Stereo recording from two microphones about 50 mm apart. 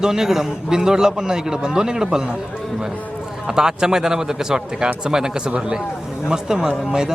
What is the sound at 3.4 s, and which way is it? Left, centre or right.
Speech, centre.